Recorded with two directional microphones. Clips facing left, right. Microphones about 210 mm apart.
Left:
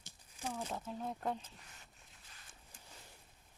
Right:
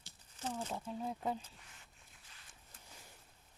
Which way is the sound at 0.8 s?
5° right (ahead or behind).